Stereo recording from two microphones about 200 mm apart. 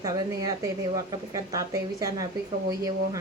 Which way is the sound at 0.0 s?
15° right (ahead or behind).